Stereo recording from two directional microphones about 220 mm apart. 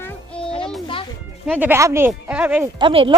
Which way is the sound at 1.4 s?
5° right (ahead or behind).